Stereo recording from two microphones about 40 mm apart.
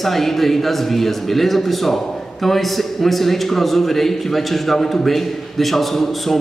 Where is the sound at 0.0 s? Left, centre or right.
Centre.